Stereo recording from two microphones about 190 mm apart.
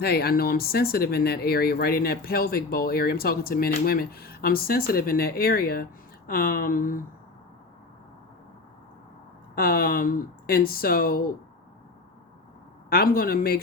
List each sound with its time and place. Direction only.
0.0 s speech: 55° left (ahead or behind)
9.6 s speech: 50° left (ahead or behind)
12.9 s speech: 55° left (ahead or behind)